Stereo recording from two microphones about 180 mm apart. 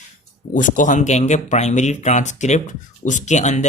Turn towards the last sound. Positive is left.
turn(degrees=40)  # may be behind; listen again after turning